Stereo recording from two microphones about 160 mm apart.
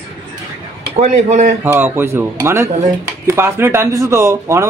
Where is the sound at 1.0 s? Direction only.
45° right (ahead or behind).